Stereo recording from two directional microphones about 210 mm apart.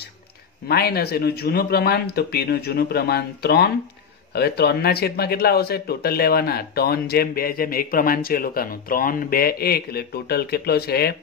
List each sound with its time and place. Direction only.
0.7 s speech: 50° left (ahead or behind)